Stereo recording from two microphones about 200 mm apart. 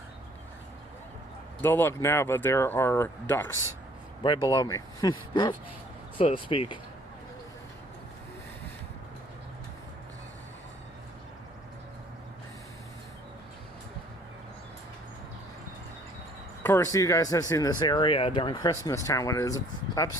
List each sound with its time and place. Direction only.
1.6 s speech: 10° left (ahead or behind)
4.2 s speech: 20° left (ahead or behind)
16.6 s speech: 15° left (ahead or behind)